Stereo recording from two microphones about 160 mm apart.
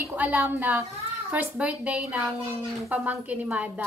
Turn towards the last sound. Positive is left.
turn(degrees=-10)  # may be behind; listen again after turning